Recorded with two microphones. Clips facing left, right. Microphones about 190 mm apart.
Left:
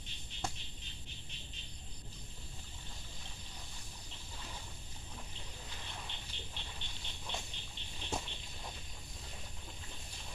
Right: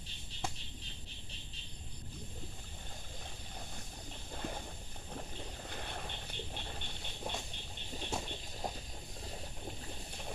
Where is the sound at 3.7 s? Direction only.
55° right (ahead or behind).